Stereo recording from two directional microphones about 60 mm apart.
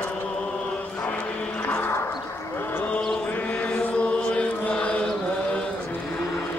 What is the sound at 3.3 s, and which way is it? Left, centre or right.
Chant, left.